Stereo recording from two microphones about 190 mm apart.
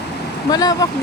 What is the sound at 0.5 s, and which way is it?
Speech, 20° left (ahead or behind).